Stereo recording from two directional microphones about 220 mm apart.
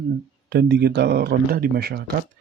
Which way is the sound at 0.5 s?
50° right (ahead or behind).